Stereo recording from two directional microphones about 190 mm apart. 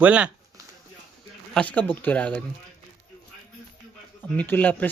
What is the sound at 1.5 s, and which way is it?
Speech, 10° left (ahead or behind).